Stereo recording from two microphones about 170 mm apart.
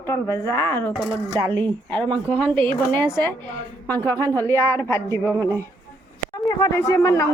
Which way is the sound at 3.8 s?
15° left (ahead or behind).